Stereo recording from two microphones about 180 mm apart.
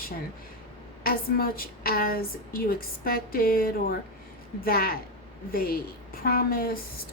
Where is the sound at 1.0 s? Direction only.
55° left (ahead or behind).